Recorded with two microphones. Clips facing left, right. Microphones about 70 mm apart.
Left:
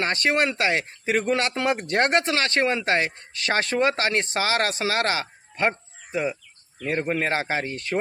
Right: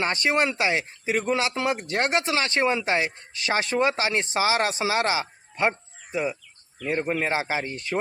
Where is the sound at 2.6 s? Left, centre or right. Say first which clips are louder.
Left 1 dB; centre.